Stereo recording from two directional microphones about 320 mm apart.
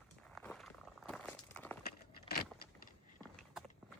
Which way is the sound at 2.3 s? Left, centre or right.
Left.